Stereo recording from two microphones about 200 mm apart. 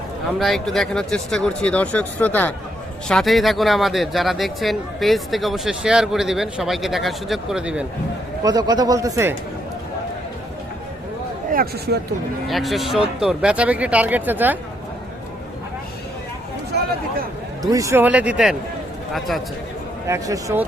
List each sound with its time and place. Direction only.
0.3 s speech: centre (ahead or behind)
8.4 s speech: 20° right (ahead or behind)
11.5 s speech: 50° right (ahead or behind)
12.5 s speech: centre (ahead or behind)
17.6 s speech: 20° right (ahead or behind)
20.1 s speech: 15° right (ahead or behind)